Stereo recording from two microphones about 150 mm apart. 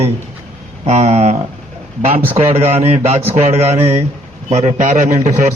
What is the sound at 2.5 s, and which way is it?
A man's voice, 45° right (ahead or behind).